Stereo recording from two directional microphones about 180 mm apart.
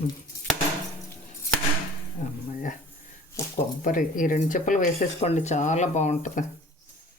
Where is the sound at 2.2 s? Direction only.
40° left (ahead or behind).